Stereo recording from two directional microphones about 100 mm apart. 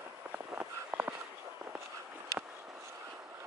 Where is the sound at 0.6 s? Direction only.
15° right (ahead or behind).